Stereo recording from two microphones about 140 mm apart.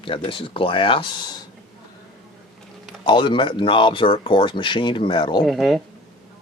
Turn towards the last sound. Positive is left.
turn(degrees=0)  # may be behind; listen again after turning